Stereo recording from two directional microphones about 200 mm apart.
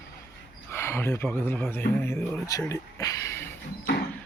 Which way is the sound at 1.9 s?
10° left (ahead or behind).